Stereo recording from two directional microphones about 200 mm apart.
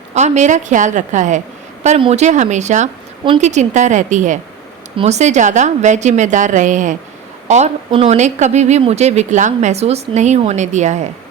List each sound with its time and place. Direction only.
0.1 s speech: 35° right (ahead or behind)